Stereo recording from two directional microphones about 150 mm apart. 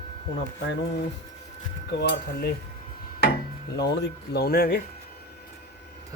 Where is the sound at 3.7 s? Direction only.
90° left.